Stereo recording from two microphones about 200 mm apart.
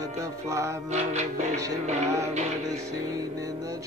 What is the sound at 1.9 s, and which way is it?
Music, 35° right (ahead or behind).